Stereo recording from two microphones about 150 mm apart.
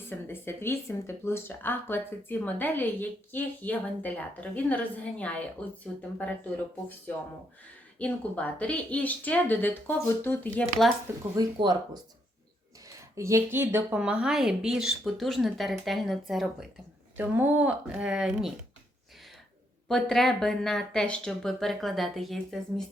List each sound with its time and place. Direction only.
0.1 s speech: 15° left (ahead or behind)
7.9 s speech: 10° left (ahead or behind)
11.3 s speech: 25° right (ahead or behind)
13.1 s speech: 20° right (ahead or behind); by 16.6 s centre (ahead or behind)
17.2 s speech: 15° right (ahead or behind)
19.9 s speech: 5° left (ahead or behind)